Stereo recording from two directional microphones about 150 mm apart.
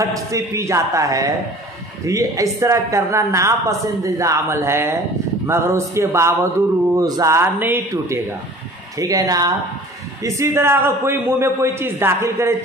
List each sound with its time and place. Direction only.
0.0 s a woman's voice: 20° right (ahead or behind)